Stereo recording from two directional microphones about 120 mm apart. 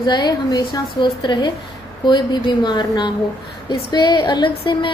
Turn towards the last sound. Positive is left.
turn(degrees=45)  # may be behind; listen again after turning